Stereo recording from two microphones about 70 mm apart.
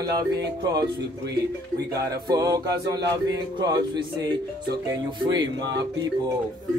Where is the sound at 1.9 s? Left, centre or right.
Right.